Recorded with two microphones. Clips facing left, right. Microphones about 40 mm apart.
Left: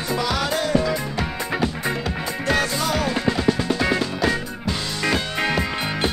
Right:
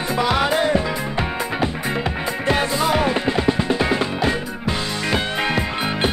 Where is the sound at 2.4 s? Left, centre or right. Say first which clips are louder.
Right 2 dB; right.